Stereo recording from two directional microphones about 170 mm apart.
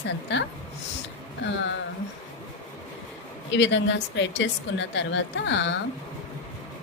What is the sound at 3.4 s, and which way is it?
A woman's voice, 90° left.